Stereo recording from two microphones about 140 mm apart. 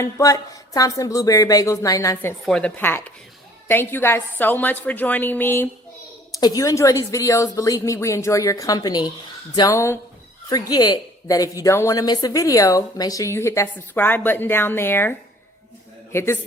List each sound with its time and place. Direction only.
0.0 s a woman's voice: 25° left (ahead or behind)
2.4 s a woman's voice: 5° left (ahead or behind)
6.4 s a woman's voice: 25° left (ahead or behind)
16.1 s a woman's voice: 15° left (ahead or behind)